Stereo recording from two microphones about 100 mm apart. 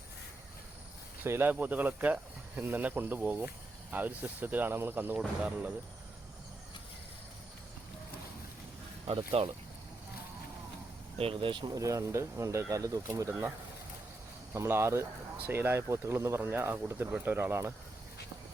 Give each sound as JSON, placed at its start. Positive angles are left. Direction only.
{"t": 1.2, "sound": "speech", "side_deg": -20}
{"t": 9.0, "sound": "speech", "side_deg": -65}
{"t": 11.2, "sound": "speech", "side_deg": -65}
{"t": 11.7, "sound": "speech", "side_deg": -35}
{"t": 14.5, "sound": "speech", "side_deg": -30}